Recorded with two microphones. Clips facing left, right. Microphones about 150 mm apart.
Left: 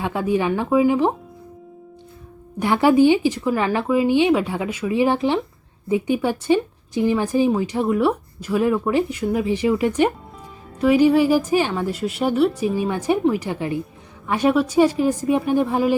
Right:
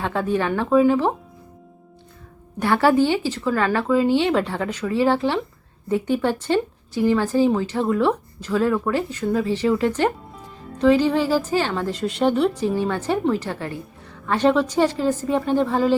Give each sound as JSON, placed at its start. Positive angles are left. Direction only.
{"t": 0.0, "sound": "speech", "side_deg": 10}
{"t": 2.6, "sound": "speech", "side_deg": 15}